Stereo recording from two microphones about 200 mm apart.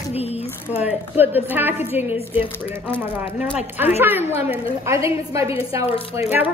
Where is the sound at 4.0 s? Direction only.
10° right (ahead or behind).